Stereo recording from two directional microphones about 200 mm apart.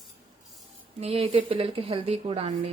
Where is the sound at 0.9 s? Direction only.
30° right (ahead or behind).